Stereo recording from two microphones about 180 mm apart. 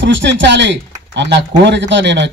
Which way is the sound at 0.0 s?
85° right.